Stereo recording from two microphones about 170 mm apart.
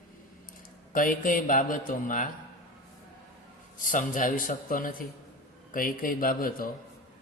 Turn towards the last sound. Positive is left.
turn(degrees=60)  # may be behind; listen again after turning